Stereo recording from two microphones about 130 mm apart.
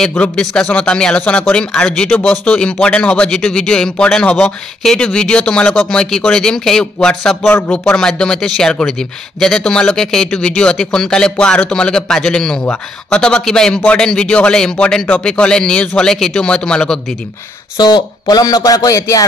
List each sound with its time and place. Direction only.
0.0 s a man's voice: 5° left (ahead or behind)
17.7 s speech: 35° left (ahead or behind)